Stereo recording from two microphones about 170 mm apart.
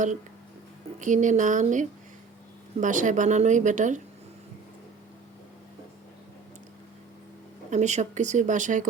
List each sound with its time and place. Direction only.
0.9 s a woman's voice: 45° right (ahead or behind)
7.7 s a woman's voice: 45° right (ahead or behind)